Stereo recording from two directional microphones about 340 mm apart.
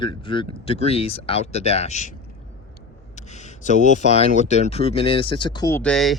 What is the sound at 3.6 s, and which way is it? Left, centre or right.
Speech, left.